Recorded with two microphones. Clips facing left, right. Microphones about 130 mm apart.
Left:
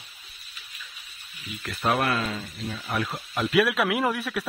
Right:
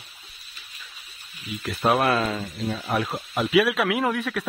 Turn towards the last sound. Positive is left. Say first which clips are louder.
# right 1 dB
turn(degrees=0)  # may be behind; listen again after turning